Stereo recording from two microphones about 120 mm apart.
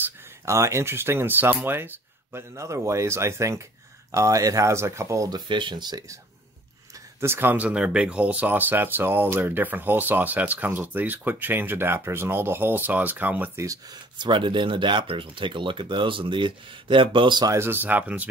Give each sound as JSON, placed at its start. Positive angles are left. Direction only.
{"t": 0.0, "sound": "speech", "side_deg": -25}
{"t": 5.5, "sound": "speech", "side_deg": -40}
{"t": 7.2, "sound": "speech", "side_deg": -20}
{"t": 13.7, "sound": "speech", "side_deg": -35}
{"t": 17.5, "sound": "speech", "side_deg": -20}